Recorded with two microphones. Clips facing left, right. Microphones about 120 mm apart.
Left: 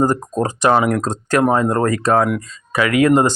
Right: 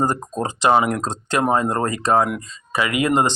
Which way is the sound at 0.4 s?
15° right (ahead or behind).